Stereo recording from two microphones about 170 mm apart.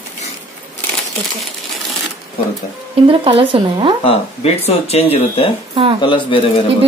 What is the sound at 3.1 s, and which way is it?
Speech, 30° right (ahead or behind).